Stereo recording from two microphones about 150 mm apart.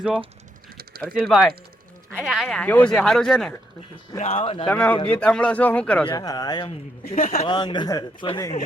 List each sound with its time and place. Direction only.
0.0 s speech: 10° right (ahead or behind)
0.8 s typing: 90° right
1.1 s speech: centre (ahead or behind)
4.2 s speech: 40° left (ahead or behind)
4.6 s speech: 10° left (ahead or behind)
6.1 s speech: 25° left (ahead or behind)
7.0 s speech: 70° left (ahead or behind)
7.4 s speech: 30° left (ahead or behind)